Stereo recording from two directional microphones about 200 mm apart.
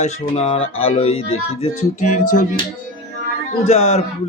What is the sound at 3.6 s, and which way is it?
Speech, 30° left (ahead or behind).